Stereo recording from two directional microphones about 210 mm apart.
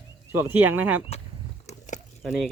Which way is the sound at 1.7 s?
30° left (ahead or behind).